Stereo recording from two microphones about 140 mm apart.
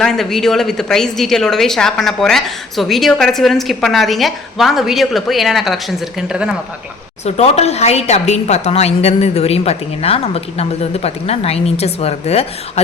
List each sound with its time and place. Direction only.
0.0 s a woman's voice: centre (ahead or behind)
7.3 s a woman's voice: 50° left (ahead or behind)